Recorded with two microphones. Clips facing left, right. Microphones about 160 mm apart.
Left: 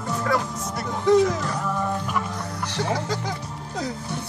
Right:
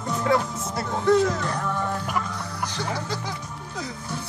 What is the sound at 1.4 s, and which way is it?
Music, 5° left (ahead or behind).